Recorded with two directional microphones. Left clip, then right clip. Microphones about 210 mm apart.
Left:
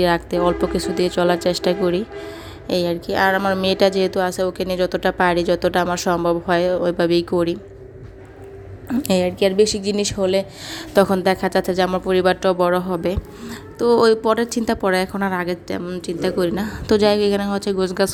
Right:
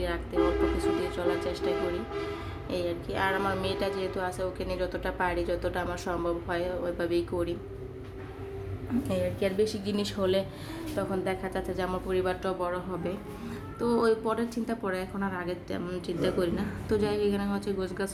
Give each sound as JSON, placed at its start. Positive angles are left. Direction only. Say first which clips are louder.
{"t": 0.0, "sound": "a woman's voice", "louder": "left 11 dB", "side_deg": 45}
{"t": 9.0, "sound": "a woman's voice", "louder": "left 12 dB", "side_deg": 35}
{"t": 10.7, "sound": "a woman's voice", "louder": "left 16 dB", "side_deg": 45}